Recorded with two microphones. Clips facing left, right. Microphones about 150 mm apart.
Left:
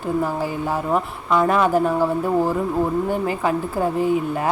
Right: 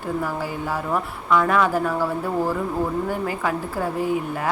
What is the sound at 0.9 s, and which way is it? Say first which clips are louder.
Speech: even; 25° left (ahead or behind).